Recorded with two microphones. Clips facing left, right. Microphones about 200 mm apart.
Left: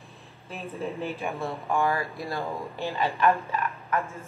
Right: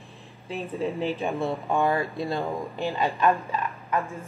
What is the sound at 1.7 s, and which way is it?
Speech, 25° right (ahead or behind).